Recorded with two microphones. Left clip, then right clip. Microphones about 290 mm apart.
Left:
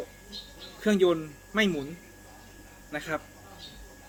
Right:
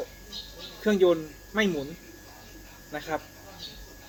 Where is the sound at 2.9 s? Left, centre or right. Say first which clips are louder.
Right 1 dB; centre.